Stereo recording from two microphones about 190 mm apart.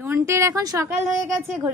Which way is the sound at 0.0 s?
15° right (ahead or behind).